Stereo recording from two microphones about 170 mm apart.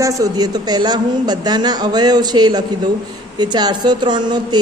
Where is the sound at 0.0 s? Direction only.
20° right (ahead or behind).